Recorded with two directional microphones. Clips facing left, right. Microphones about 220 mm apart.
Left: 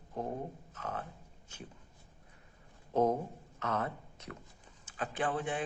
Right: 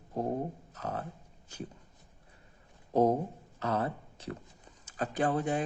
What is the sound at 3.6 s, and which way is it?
Speech, 35° right (ahead or behind).